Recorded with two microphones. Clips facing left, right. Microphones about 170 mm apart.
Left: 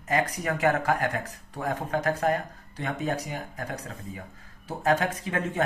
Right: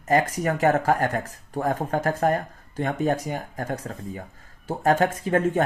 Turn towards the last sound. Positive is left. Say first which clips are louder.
# right 6 dB
turn(degrees=-45)  # may be behind; listen again after turning